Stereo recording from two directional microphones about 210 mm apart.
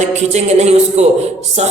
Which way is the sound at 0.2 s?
30° right (ahead or behind).